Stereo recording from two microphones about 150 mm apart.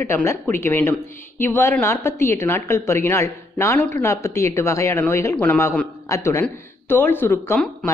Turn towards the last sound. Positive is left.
turn(degrees=15)  # may be behind; listen again after turning